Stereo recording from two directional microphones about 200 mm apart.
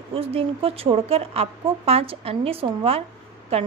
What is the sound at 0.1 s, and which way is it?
A woman's voice, 30° right (ahead or behind).